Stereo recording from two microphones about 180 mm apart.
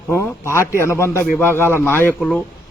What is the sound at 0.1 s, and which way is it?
Speech, 15° left (ahead or behind).